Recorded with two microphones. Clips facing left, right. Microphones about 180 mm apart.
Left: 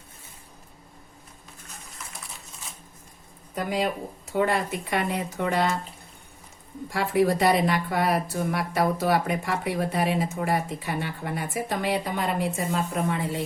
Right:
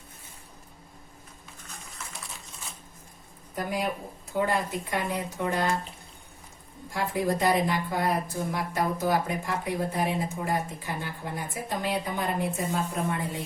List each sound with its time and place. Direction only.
3.5 s speech: 75° left (ahead or behind)
6.9 s speech: 75° left (ahead or behind)